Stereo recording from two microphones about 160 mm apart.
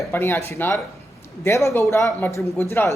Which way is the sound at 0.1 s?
15° left (ahead or behind).